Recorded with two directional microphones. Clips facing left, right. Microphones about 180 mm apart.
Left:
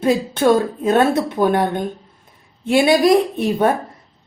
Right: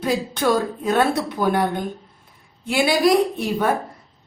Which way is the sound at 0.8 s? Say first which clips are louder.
Left 4 dB; 25° left (ahead or behind).